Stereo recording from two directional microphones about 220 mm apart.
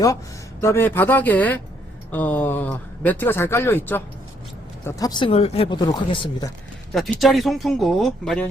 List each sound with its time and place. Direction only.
0.6 s speech: 10° left (ahead or behind)
6.9 s speech: centre (ahead or behind)